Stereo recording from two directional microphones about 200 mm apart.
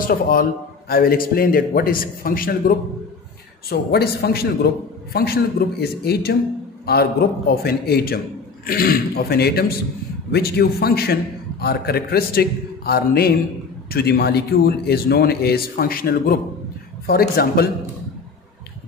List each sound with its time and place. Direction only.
0.1 s speech: 45° left (ahead or behind)